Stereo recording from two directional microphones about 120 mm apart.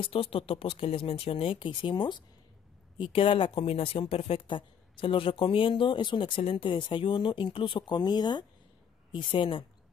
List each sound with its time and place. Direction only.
0.0 s speech: 50° left (ahead or behind)